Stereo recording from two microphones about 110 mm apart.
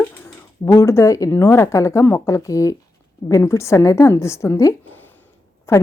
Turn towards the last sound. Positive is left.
turn(degrees=25)  # may be behind; listen again after turning